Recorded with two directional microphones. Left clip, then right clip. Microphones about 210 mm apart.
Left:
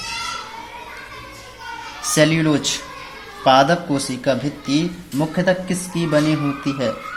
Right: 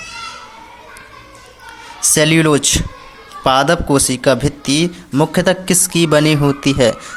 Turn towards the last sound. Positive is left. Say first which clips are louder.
# right 9 dB
turn(degrees=-45)  # may be behind; listen again after turning